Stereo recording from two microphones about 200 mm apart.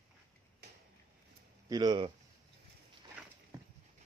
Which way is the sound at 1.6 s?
20° right (ahead or behind).